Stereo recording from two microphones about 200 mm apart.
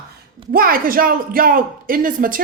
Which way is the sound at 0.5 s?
45° right (ahead or behind).